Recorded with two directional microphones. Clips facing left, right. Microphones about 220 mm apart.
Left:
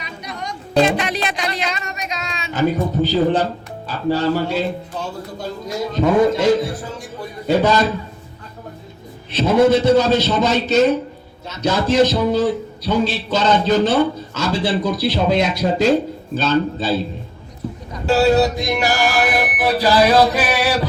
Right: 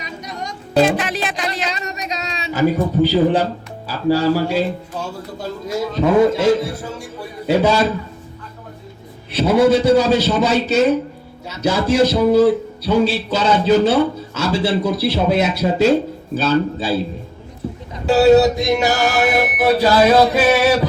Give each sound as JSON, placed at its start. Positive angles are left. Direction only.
{"t": 0.0, "sound": "music", "side_deg": -45}
{"t": 0.9, "sound": "speech", "side_deg": 0}
{"t": 1.6, "sound": "a sound", "side_deg": -35}
{"t": 2.5, "sound": "a man's voice", "side_deg": -10}
{"t": 9.3, "sound": "a man's voice", "side_deg": -10}
{"t": 17.9, "sound": "music", "side_deg": -20}